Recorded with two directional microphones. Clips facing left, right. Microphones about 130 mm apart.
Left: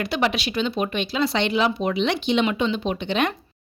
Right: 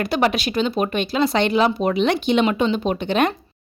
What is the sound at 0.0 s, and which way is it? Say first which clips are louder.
A woman's voice: right 4 dB; 45° right (ahead or behind).